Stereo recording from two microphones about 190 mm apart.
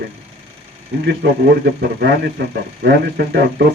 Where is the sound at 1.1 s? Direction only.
60° right (ahead or behind).